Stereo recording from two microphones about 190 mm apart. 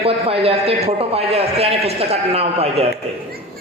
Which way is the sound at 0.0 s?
30° right (ahead or behind).